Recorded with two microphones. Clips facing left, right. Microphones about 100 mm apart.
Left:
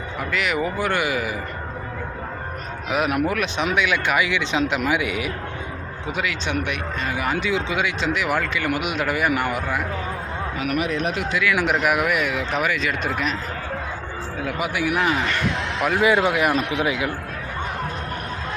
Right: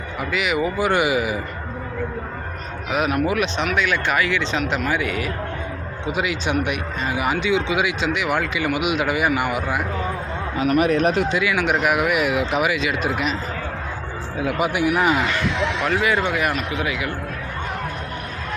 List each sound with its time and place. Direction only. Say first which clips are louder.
0.2 s a man's voice: right 2 dB; 5° right (ahead or behind)
2.9 s speech: right 1 dB; centre (ahead or behind)
6.1 s a man's voice: right 3 dB; 15° right (ahead or behind)
7.3 s speech: right 3 dB; centre (ahead or behind)
10.8 s a man's voice: right 7 dB; 45° right (ahead or behind)
11.5 s speech: left 1 dB; centre (ahead or behind)
12.2 s a man's voice: right 3 dB; 15° right (ahead or behind)
14.6 s a man's voice: right 3 dB; 20° right (ahead or behind)
15.8 s speech: left 4 dB; 5° left (ahead or behind)
16.0 s speech: left 2 dB; 15° left (ahead or behind)